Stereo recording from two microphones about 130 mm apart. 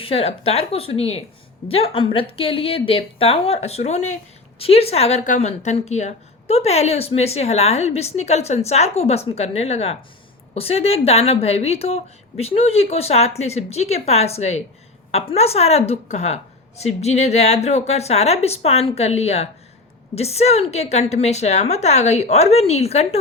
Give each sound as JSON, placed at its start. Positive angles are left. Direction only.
{"t": 0.0, "sound": "a woman's voice", "side_deg": 50}